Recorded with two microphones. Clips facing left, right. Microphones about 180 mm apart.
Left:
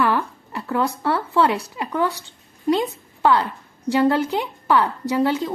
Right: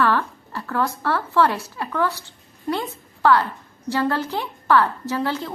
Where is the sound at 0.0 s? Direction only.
15° left (ahead or behind).